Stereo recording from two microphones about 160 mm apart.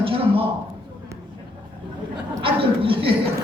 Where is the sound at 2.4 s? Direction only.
35° right (ahead or behind).